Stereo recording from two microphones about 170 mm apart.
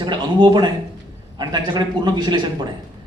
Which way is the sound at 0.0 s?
25° right (ahead or behind).